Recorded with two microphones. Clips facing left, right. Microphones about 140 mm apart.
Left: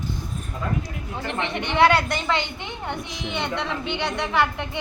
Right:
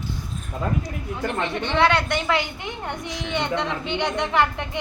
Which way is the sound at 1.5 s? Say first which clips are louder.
Left 2 dB; 15° left (ahead or behind).